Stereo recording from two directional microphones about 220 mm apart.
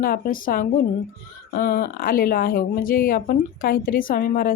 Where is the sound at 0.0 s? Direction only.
40° left (ahead or behind).